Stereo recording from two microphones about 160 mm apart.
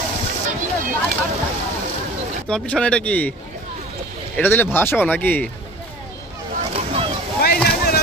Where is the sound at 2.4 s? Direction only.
5° left (ahead or behind).